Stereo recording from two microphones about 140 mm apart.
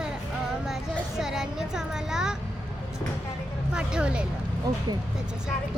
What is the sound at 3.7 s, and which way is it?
Speech, 5° right (ahead or behind).